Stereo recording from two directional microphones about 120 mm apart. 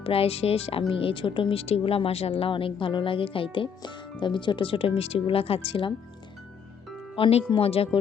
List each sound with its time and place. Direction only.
0.0 s speech: 55° left (ahead or behind)
7.2 s speech: 50° left (ahead or behind)